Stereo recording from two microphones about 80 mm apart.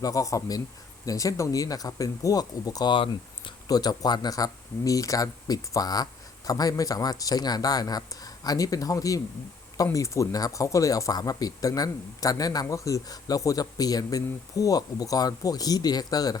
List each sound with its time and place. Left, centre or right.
0.0 s speech: left
2.9 s speech: left
3.7 s speech: left